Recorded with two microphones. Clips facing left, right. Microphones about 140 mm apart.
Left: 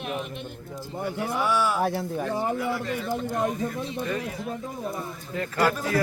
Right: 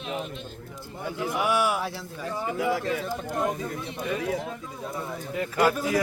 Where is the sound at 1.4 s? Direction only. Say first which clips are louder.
Even; 15° right (ahead or behind).